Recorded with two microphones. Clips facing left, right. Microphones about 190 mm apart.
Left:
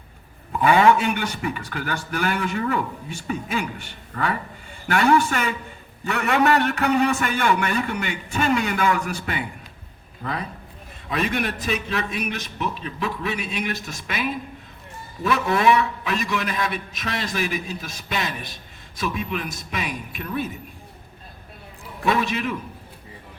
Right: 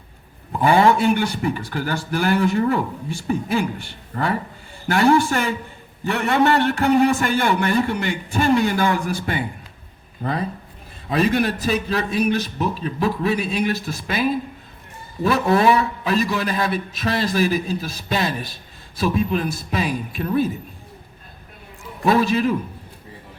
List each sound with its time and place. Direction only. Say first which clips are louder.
0.6 s a man's voice: right 1 dB; 35° right (ahead or behind)
11.1 s a man's voice: right 6 dB; 35° right (ahead or behind)
22.0 s a man's voice: right 5 dB; 35° right (ahead or behind)